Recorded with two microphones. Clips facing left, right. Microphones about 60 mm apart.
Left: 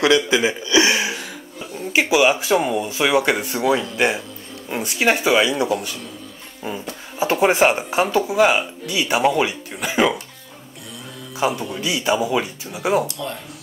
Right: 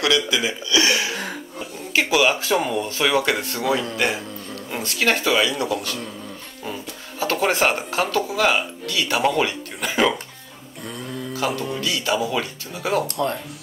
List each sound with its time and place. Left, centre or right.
0.0 s a man's voice: left
7.2 s speech: centre
11.3 s speech: centre
13.1 s speech: right